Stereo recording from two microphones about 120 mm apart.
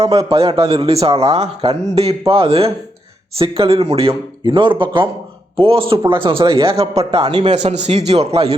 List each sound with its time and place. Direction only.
0.0 s a man's voice: 55° right (ahead or behind)